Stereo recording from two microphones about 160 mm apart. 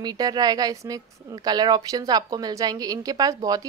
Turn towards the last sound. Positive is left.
turn(degrees=-20)  # may be behind; listen again after turning